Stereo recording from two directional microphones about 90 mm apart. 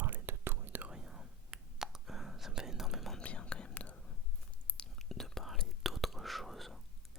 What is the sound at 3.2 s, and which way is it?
Whispering, 15° left (ahead or behind).